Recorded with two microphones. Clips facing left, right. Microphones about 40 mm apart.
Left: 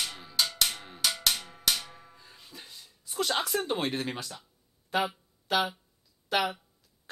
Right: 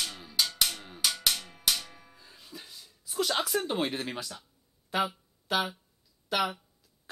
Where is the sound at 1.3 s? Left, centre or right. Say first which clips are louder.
Left 1 dB; centre.